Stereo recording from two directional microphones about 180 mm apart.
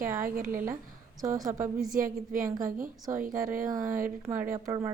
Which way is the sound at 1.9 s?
50° right (ahead or behind).